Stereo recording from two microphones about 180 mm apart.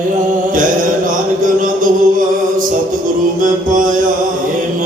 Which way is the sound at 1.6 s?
50° right (ahead or behind).